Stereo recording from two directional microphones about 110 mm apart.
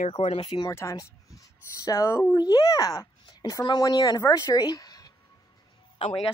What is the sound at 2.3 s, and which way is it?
Speech, 40° left (ahead or behind).